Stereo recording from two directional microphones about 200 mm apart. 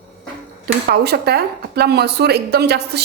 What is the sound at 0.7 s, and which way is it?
Speech, 55° right (ahead or behind).